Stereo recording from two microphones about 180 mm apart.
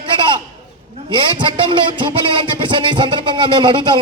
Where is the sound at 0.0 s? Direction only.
25° right (ahead or behind).